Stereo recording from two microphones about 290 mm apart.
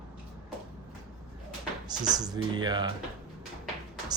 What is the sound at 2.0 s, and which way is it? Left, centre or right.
Speech, centre.